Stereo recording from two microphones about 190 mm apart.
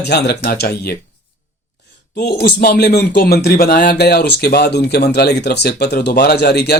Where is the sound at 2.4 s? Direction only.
55° left (ahead or behind).